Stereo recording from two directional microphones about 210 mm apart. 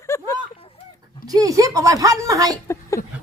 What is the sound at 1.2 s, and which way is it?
A woman's voice, 15° right (ahead or behind).